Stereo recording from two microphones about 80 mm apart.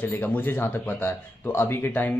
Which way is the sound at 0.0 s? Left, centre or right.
Left.